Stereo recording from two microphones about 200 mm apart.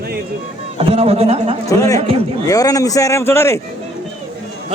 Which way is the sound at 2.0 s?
30° right (ahead or behind).